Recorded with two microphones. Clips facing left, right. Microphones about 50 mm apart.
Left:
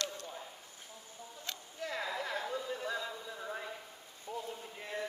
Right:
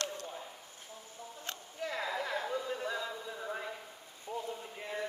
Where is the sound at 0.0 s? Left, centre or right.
Right.